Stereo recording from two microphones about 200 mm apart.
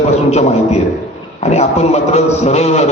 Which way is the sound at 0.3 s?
35° left (ahead or behind).